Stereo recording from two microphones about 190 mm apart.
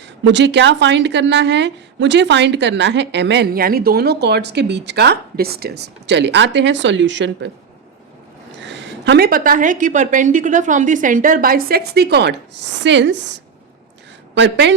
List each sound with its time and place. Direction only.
0.3 s a woman's voice: 65° right (ahead or behind)
8.6 s a woman's voice: 70° right (ahead or behind)